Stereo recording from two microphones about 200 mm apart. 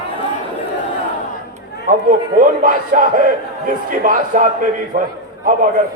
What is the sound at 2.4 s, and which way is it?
Speech, 40° right (ahead or behind).